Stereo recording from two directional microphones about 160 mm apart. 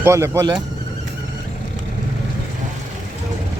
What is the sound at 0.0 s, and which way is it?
Speech, 15° right (ahead or behind).